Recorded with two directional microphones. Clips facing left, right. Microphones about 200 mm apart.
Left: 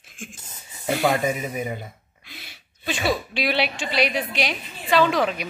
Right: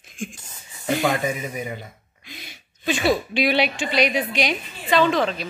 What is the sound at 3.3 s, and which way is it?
A woman's voice, centre (ahead or behind).